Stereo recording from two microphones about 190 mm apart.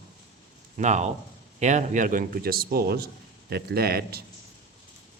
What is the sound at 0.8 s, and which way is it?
A man's voice, 40° right (ahead or behind).